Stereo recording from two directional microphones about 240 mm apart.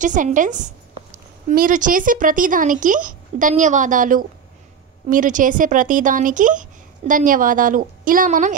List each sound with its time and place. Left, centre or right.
0.0 s speech: right